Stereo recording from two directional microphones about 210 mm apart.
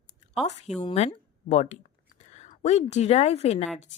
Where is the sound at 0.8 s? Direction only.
30° left (ahead or behind).